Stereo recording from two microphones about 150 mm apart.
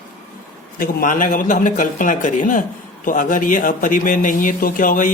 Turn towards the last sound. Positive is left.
turn(degrees=65)  # may be behind; listen again after turning